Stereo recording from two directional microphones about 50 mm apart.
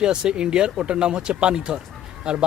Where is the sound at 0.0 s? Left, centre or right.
Centre.